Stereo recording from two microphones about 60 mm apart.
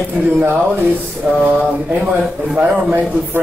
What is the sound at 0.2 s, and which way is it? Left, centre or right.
Speech, right.